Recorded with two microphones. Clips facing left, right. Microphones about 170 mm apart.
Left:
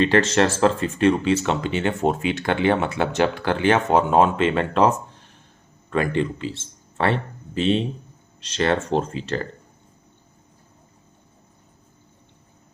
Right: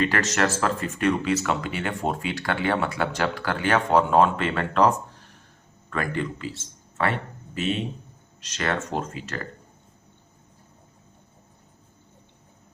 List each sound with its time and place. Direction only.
0.0 s a man's voice: 30° left (ahead or behind)